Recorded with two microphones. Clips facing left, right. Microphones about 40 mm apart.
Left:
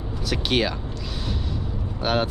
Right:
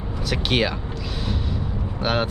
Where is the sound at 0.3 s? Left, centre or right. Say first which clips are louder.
Right 1 dB; centre.